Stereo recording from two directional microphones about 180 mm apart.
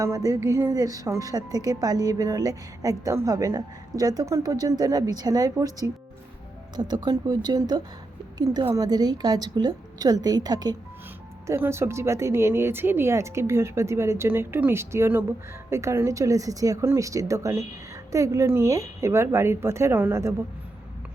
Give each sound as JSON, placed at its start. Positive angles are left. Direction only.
{"t": 0.0, "sound": "a woman's voice", "side_deg": -20}